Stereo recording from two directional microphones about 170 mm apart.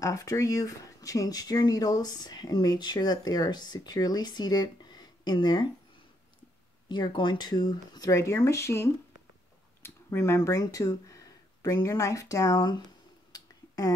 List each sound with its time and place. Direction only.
0.0 s speech: 20° left (ahead or behind)
6.9 s speech: 30° left (ahead or behind)
13.3 s finger snapping: 20° left (ahead or behind)